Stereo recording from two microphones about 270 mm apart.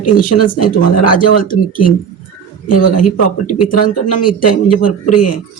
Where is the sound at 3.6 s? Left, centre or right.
Left.